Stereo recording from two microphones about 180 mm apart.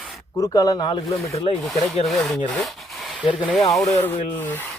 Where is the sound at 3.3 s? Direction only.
5° right (ahead or behind).